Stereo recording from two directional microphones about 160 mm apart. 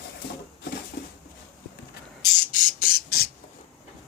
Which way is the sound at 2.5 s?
65° left (ahead or behind).